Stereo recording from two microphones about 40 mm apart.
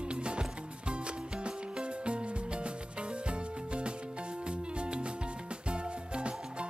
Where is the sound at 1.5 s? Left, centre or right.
Right.